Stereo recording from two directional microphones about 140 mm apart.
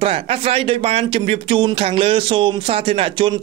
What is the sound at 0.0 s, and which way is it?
Speech, 45° right (ahead or behind).